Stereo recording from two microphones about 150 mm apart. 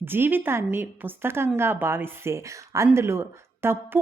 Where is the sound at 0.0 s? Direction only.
15° right (ahead or behind).